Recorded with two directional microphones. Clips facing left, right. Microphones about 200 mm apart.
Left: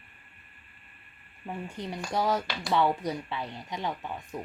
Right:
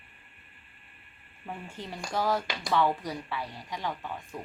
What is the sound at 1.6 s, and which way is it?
Speech, 15° left (ahead or behind).